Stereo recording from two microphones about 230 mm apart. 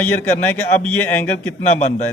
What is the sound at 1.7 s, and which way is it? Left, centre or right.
Speech, left.